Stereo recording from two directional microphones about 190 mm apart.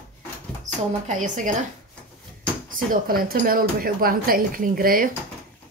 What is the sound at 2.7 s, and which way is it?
Speech, 50° right (ahead or behind).